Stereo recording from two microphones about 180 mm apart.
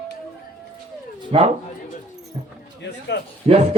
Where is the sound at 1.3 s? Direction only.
30° right (ahead or behind).